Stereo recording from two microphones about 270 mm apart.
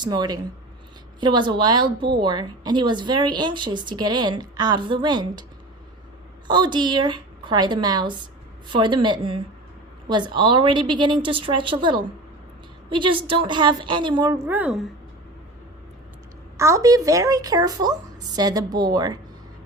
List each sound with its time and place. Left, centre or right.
0.0 s speech: centre
6.5 s speech: centre
16.6 s speech: centre